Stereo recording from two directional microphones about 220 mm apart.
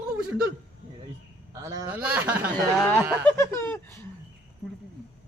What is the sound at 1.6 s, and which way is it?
Speech, 15° right (ahead or behind).